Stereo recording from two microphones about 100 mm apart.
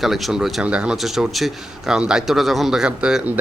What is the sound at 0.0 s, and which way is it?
Speech, centre (ahead or behind).